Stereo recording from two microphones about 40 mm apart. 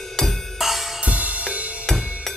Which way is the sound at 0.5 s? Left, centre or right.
Centre.